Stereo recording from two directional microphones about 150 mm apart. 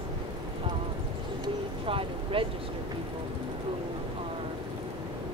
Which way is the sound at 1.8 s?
35° right (ahead or behind).